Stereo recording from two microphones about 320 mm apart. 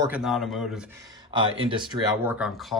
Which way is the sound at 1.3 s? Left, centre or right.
Centre.